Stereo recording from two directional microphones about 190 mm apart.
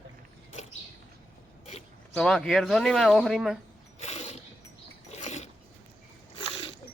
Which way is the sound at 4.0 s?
35° left (ahead or behind).